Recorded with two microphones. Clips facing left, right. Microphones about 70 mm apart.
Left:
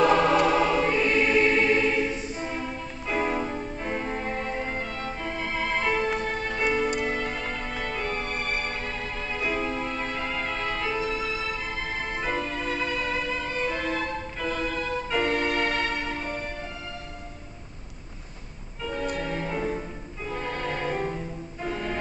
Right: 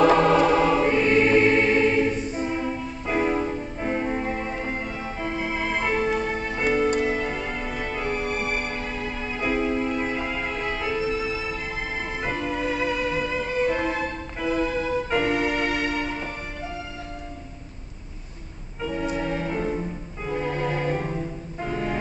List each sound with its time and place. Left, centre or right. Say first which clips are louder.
0.4 s choir: right 3 dB; centre
0.8 s choir: right 4 dB; right
3.1 s music: right 3 dB; centre
15.1 s organ: right 1 dB; centre
19.1 s music: right 3 dB; centre
21.6 s music: right 3 dB; centre